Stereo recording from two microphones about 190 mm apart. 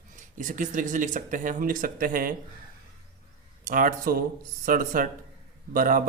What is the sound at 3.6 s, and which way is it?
Speech, 45° right (ahead or behind).